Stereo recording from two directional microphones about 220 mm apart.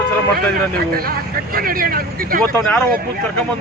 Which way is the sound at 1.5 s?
40° right (ahead or behind).